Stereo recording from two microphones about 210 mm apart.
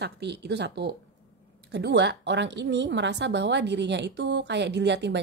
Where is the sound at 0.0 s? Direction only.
55° right (ahead or behind).